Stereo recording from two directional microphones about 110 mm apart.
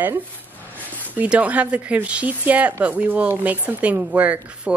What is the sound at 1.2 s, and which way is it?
A woman's voice, 15° right (ahead or behind).